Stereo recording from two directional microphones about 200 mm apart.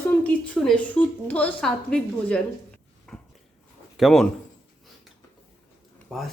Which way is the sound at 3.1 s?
5° left (ahead or behind).